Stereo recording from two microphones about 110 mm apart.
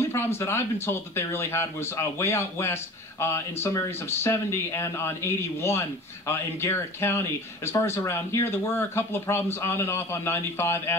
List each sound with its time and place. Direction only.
0.1 s speech: 25° left (ahead or behind)